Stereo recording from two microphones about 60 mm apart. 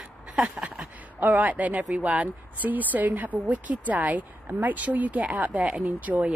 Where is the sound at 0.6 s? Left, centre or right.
Right.